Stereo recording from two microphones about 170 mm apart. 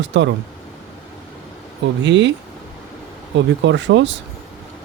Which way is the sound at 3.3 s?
90° right.